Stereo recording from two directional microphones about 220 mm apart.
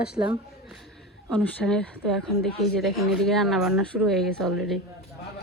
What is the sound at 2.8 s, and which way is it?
Speech, centre (ahead or behind).